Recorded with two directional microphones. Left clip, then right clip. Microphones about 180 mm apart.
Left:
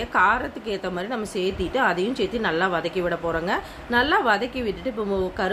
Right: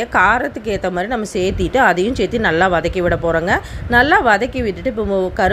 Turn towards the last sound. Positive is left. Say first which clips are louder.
# right 8 dB
turn(degrees=-35)  # may be behind; listen again after turning